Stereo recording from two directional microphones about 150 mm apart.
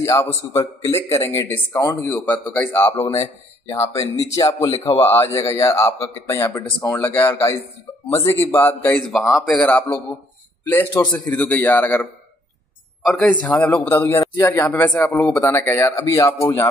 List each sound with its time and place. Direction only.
0.0 s a man's voice: 15° left (ahead or behind)